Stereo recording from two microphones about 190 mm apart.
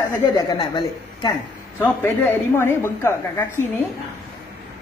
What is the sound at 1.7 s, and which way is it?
A woman's voice, 10° left (ahead or behind).